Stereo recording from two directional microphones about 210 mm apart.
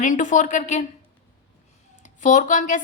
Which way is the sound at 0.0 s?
35° left (ahead or behind).